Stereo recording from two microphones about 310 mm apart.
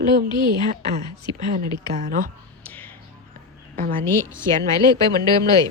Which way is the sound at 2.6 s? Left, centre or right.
Centre.